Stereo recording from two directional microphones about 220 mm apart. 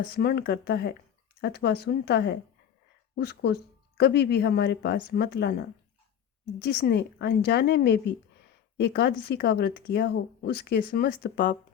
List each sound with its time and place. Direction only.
0.1 s speech: 45° left (ahead or behind)